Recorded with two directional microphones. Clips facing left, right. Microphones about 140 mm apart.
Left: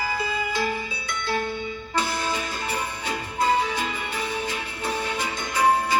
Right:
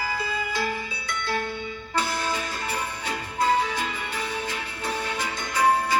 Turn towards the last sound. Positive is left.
turn(degrees=15)  # may be behind; listen again after turning